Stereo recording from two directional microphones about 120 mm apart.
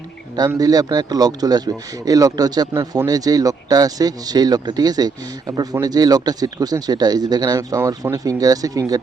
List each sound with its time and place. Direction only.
0.3 s speech: 30° right (ahead or behind)